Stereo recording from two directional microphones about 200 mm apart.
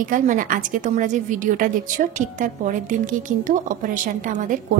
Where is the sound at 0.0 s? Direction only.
40° right (ahead or behind).